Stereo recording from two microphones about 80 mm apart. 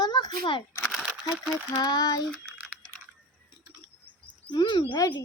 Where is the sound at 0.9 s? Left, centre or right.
Centre.